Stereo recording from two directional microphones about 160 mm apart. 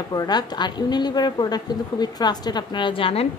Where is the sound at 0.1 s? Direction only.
25° left (ahead or behind).